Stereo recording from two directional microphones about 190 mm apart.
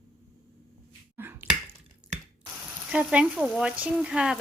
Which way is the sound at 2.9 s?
5° right (ahead or behind).